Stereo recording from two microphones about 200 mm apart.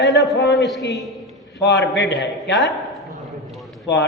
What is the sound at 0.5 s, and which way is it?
Speech, centre (ahead or behind).